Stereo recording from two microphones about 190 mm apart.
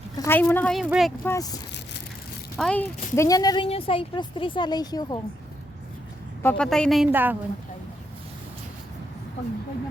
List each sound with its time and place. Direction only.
0.3 s a woman's voice: 10° left (ahead or behind)
1.2 s speech: 15° left (ahead or behind)
2.6 s a woman's voice: 5° left (ahead or behind)
6.4 s a woman's voice: 5° left (ahead or behind); by 7.3 s 10° right (ahead or behind)